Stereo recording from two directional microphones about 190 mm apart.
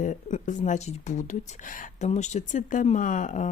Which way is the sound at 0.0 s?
40° left (ahead or behind).